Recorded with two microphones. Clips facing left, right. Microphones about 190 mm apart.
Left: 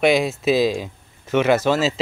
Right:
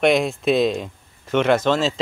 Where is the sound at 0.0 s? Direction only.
Centre (ahead or behind).